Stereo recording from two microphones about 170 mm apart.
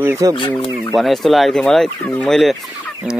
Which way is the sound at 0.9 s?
Centre (ahead or behind).